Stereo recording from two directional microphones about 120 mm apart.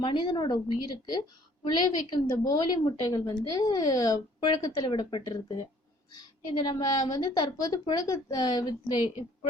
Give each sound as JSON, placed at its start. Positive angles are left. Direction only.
{"t": 0.0, "sound": "a woman's voice", "side_deg": 40}